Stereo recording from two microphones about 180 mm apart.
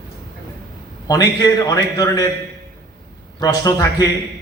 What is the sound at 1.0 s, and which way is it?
A man's voice, 20° left (ahead or behind).